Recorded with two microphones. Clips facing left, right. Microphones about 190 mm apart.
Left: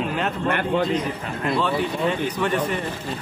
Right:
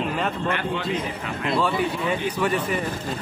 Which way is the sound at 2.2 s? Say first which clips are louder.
Left 1 dB; 10° right (ahead or behind).